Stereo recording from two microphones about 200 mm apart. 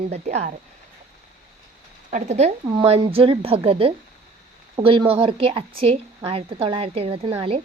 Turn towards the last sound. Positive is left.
turn(degrees=-30)  # may be behind; listen again after turning